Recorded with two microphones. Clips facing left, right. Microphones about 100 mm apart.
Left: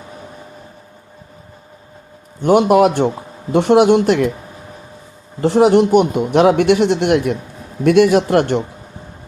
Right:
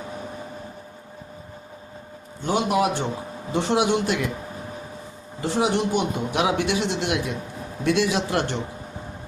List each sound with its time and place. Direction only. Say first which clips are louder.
2.4 s a man's voice: left 11 dB; 65° left (ahead or behind)
5.4 s a man's voice: left 11 dB; 65° left (ahead or behind)